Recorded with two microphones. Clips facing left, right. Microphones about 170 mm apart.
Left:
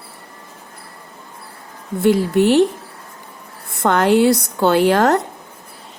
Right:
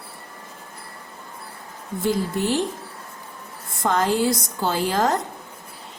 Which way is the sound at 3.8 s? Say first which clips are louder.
Left 7 dB; 70° left (ahead or behind).